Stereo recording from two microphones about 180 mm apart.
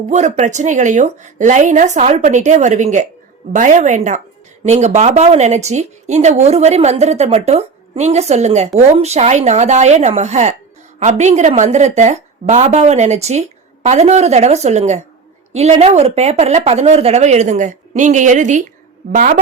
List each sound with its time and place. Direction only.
0.1 s a woman's voice: 40° right (ahead or behind)